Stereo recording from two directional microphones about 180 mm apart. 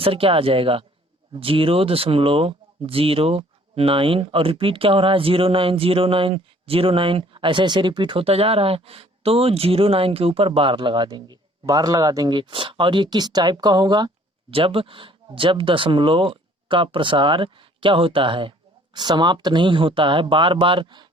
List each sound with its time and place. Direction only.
0.0 s speech: 30° right (ahead or behind)